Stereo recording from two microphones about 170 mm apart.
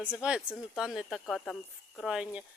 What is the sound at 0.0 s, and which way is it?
A woman's voice, 5° right (ahead or behind).